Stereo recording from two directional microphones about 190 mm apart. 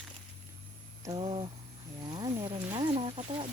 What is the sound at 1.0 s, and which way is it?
Speech, 25° right (ahead or behind).